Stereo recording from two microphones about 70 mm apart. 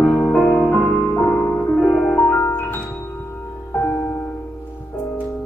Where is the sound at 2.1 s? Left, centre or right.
Left.